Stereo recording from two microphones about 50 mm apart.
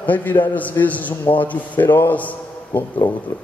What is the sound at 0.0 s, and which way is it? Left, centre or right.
A man's voice, left.